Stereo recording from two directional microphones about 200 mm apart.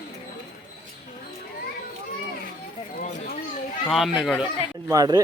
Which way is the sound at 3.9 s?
Centre (ahead or behind).